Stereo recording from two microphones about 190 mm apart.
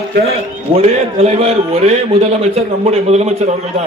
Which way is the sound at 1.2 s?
35° right (ahead or behind).